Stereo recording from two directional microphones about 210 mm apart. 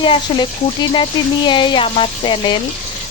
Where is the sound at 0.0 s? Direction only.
25° left (ahead or behind).